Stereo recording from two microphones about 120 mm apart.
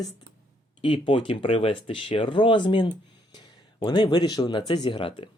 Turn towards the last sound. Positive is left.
turn(degrees=45)  # may be behind; listen again after turning